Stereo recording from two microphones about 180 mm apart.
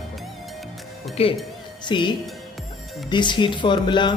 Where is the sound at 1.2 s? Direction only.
35° left (ahead or behind).